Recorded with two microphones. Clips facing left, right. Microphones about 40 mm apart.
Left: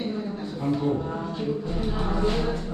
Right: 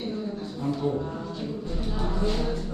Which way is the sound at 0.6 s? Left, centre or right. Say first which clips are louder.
Left 2 dB; centre.